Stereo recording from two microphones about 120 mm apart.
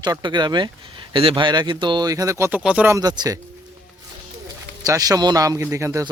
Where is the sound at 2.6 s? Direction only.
10° right (ahead or behind).